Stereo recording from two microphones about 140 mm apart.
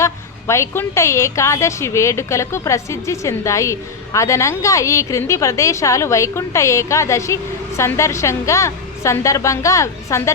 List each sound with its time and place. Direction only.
0.0 s a woman's voice: 20° left (ahead or behind)